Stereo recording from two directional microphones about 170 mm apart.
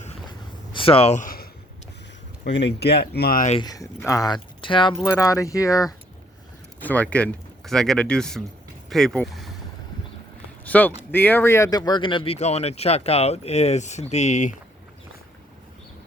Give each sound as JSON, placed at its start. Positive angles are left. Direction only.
{"t": 0.7, "sound": "a sound", "side_deg": 30}
{"t": 2.4, "sound": "speech", "side_deg": 90}
{"t": 3.6, "sound": "speech", "side_deg": 20}
{"t": 4.9, "sound": "speech", "side_deg": 15}
{"t": 6.8, "sound": "speech", "side_deg": 10}
{"t": 10.7, "sound": "speech", "side_deg": 10}